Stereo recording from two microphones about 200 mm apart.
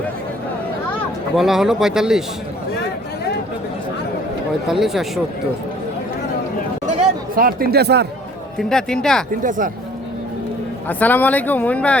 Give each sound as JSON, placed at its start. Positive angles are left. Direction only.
{"t": 1.4, "sound": "speech", "side_deg": 0}
{"t": 4.7, "sound": "speech", "side_deg": 0}
{"t": 7.3, "sound": "speech", "side_deg": -45}
{"t": 8.5, "sound": "speech", "side_deg": 5}
{"t": 9.4, "sound": "speech", "side_deg": -40}
{"t": 10.8, "sound": "speech", "side_deg": 10}